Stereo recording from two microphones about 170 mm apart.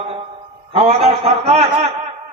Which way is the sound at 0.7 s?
40° right (ahead or behind).